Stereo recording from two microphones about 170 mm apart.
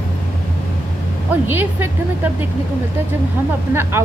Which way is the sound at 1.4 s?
10° right (ahead or behind).